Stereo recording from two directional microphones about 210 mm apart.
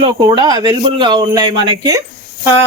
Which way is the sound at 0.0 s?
20° right (ahead or behind).